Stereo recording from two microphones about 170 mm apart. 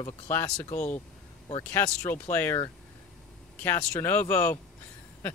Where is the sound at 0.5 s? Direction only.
40° left (ahead or behind).